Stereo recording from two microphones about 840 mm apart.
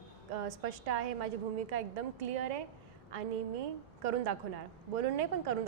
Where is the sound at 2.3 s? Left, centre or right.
Right.